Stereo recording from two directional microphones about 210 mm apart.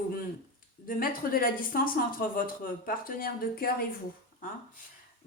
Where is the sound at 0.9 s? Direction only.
45° left (ahead or behind).